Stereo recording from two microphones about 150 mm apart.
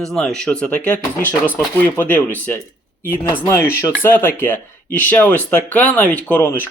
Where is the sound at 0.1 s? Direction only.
5° left (ahead or behind).